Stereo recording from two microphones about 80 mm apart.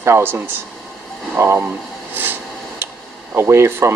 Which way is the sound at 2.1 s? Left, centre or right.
Right.